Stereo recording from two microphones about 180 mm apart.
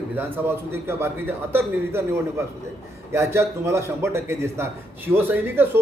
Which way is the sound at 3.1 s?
15° right (ahead or behind).